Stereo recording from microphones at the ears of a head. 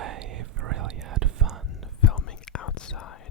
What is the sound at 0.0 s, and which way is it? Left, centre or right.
Whispering, right.